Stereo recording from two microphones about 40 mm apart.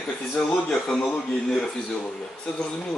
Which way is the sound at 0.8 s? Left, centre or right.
Left.